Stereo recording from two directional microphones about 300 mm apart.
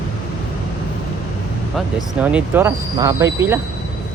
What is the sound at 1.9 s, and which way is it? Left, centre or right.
Speech, centre.